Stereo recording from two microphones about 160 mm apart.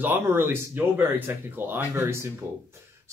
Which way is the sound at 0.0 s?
15° right (ahead or behind).